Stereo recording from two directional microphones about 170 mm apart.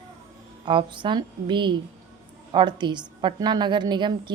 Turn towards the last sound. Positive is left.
turn(degrees=-25)  # may be behind; listen again after turning